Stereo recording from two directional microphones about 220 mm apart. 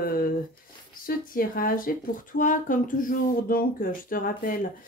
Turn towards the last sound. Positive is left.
turn(degrees=40)  # may be behind; listen again after turning